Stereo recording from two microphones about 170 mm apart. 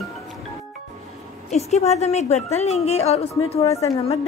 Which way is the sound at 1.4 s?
40° left (ahead or behind).